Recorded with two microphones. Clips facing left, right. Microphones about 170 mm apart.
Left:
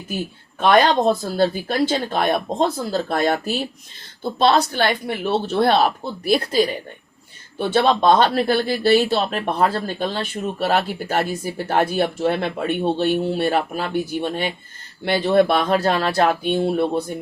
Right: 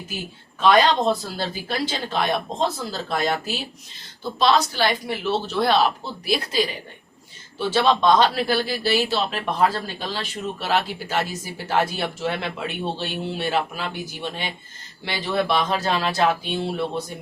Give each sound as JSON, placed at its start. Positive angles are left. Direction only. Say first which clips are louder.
{"t": 0.6, "sound": "speech", "louder": "left 2 dB", "side_deg": 55}
{"t": 7.6, "sound": "speech", "louder": "left 2 dB", "side_deg": 55}